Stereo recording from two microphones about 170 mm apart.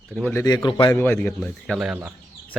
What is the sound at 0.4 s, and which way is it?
Speech, 25° left (ahead or behind).